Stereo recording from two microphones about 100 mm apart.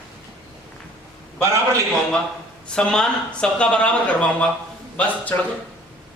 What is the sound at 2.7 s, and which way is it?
Speech, 5° left (ahead or behind).